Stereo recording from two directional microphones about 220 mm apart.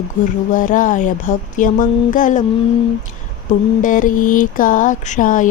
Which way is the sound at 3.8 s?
35° left (ahead or behind).